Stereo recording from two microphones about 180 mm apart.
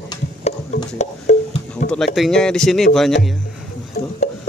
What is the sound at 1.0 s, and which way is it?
Music, 40° left (ahead or behind).